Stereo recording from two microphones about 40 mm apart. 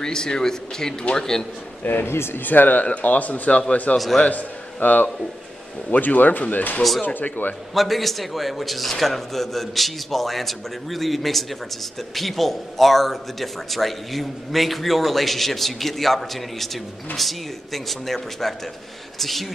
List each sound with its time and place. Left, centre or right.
0.0 s speech: centre
1.8 s speech: left
2.0 s speech: left
2.4 s a man's voice: left
7.7 s speech: centre